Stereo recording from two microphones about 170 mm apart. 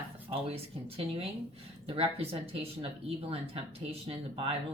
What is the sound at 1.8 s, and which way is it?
A woman's voice, 35° right (ahead or behind).